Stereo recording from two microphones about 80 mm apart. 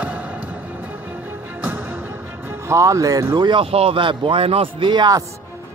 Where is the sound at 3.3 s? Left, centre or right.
Right.